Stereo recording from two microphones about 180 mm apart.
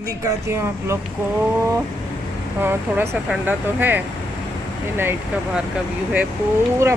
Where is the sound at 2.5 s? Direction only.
10° right (ahead or behind).